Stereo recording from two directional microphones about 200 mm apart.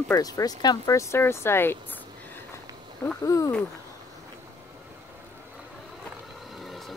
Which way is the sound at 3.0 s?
15° left (ahead or behind).